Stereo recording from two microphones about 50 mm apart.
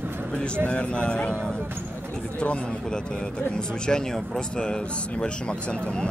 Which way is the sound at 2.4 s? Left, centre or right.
Left.